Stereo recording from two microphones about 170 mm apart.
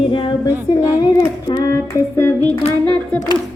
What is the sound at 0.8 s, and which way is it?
Child singing, 15° left (ahead or behind).